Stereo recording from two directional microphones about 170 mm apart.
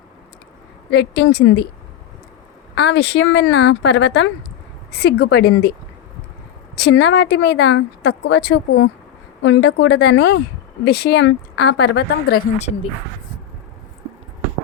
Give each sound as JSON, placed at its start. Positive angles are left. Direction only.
{"t": 0.9, "sound": "speech", "side_deg": 80}
{"t": 2.7, "sound": "speech", "side_deg": 90}
{"t": 6.7, "sound": "a woman's voice", "side_deg": 85}
{"t": 10.8, "sound": "speech", "side_deg": 75}
{"t": 12.5, "sound": "a woman's voice", "side_deg": 40}